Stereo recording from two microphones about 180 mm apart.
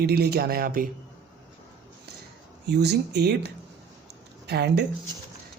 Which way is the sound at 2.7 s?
65° right (ahead or behind).